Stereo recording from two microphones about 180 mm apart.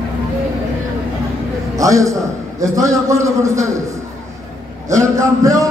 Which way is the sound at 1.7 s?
20° right (ahead or behind).